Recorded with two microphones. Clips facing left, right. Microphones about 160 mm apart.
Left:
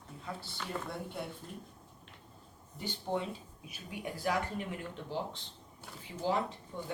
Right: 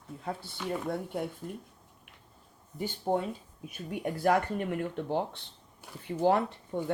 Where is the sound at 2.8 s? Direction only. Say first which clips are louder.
Right 6 dB; 50° right (ahead or behind).